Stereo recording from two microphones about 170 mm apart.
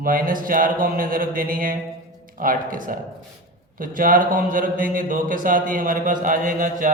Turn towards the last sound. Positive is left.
turn(degrees=-50)  # may be behind; listen again after turning